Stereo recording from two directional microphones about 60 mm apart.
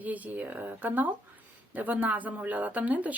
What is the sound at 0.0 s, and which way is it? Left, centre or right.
A woman's voice, right.